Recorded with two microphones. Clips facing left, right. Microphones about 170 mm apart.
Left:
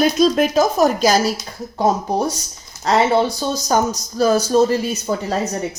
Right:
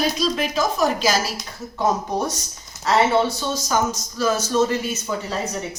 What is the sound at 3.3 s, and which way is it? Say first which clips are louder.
A woman's voice: left 4 dB; 40° left (ahead or behind).